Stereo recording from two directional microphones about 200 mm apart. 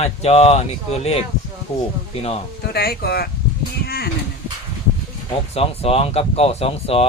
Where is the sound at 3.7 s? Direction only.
50° left (ahead or behind).